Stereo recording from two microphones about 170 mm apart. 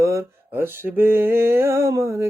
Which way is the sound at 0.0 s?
15° right (ahead or behind).